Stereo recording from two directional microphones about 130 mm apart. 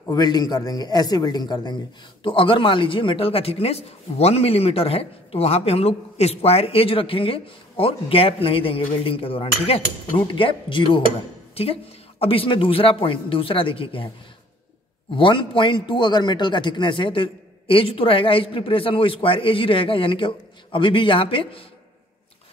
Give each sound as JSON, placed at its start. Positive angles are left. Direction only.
{"t": 0.1, "sound": "a man's voice", "side_deg": 30}
{"t": 15.1, "sound": "a man's voice", "side_deg": 40}